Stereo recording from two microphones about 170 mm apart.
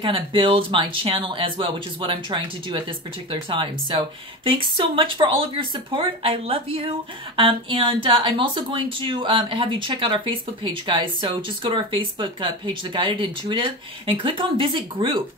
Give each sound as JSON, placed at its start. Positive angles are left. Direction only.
{"t": 0.0, "sound": "speech", "side_deg": -30}